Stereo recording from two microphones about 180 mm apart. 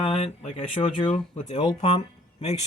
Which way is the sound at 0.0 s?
30° left (ahead or behind).